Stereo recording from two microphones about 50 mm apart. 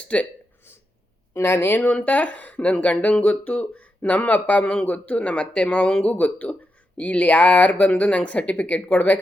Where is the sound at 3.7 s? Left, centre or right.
Left.